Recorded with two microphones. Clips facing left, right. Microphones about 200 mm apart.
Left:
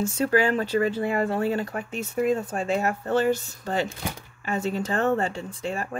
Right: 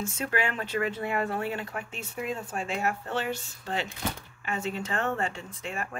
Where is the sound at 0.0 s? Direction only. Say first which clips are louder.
Left 8 dB; 35° left (ahead or behind).